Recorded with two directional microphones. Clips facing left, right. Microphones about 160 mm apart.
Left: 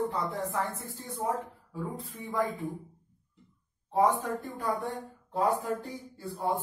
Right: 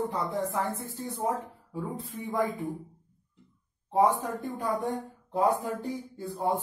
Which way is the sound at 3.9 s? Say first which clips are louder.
Right 1 dB; 20° right (ahead or behind).